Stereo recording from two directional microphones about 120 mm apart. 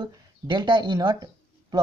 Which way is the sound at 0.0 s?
40° right (ahead or behind).